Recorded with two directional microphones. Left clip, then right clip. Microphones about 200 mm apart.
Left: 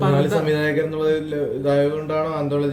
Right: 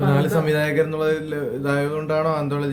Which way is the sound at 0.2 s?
30° right (ahead or behind).